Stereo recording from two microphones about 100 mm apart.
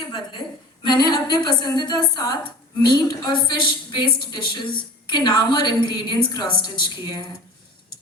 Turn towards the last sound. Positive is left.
turn(degrees=50)  # may be behind; listen again after turning